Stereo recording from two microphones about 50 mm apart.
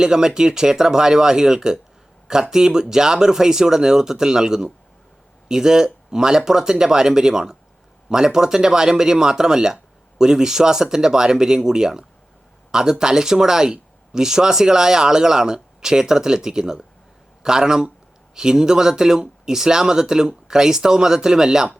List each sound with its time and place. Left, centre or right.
0.0 s speech: centre